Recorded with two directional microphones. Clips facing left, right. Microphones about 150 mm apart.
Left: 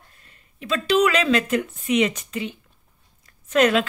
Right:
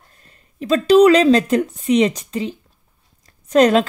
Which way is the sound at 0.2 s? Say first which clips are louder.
Right 8 dB; 35° right (ahead or behind).